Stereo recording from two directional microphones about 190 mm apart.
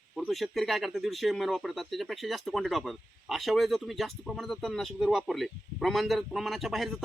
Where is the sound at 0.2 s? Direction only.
Centre (ahead or behind).